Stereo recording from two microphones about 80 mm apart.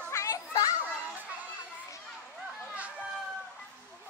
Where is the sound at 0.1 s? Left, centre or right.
Left.